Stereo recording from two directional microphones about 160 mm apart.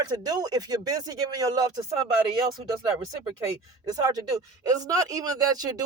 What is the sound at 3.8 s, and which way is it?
Speech, 25° right (ahead or behind).